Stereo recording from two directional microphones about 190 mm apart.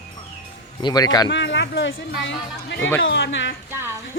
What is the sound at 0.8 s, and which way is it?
Speech, 20° left (ahead or behind).